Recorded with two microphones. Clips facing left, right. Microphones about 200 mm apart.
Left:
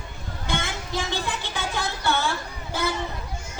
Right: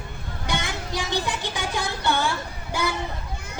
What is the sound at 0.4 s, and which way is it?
Speech, 15° right (ahead or behind).